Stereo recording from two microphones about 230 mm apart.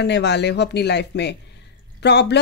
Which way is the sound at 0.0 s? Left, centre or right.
Left.